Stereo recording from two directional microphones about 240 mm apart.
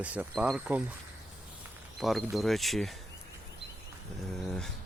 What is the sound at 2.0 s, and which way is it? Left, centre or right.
Speech, centre.